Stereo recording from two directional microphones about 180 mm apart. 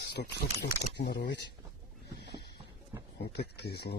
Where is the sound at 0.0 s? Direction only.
65° left (ahead or behind).